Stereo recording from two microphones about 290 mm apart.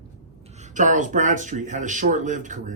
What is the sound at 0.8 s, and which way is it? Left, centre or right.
Speech, right.